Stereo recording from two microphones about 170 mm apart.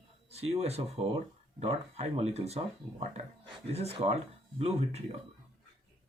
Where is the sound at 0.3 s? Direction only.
35° right (ahead or behind).